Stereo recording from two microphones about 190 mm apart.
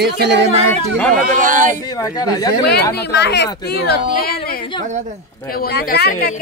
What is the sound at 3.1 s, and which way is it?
Speech, 65° left (ahead or behind).